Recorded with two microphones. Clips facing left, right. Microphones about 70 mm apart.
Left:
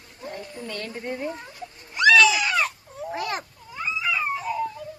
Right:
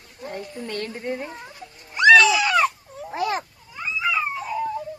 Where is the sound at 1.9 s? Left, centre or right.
Right.